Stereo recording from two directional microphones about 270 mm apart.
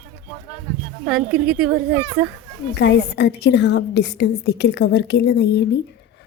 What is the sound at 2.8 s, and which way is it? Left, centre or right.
A woman's voice, left.